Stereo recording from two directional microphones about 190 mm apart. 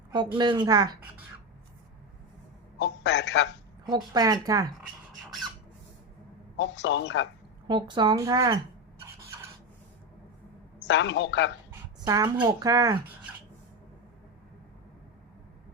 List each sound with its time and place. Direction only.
0.1 s speech: 25° right (ahead or behind)
2.7 s a man's voice: 70° left (ahead or behind)
3.8 s speech: 20° right (ahead or behind)
6.6 s a man's voice: 70° left (ahead or behind)
7.7 s speech: 25° right (ahead or behind)
10.8 s a man's voice: 70° left (ahead or behind)
11.9 s speech: 20° right (ahead or behind)